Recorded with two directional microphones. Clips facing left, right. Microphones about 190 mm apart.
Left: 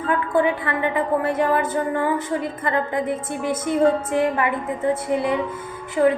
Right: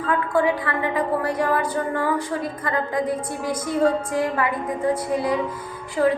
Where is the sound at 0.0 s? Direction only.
25° left (ahead or behind).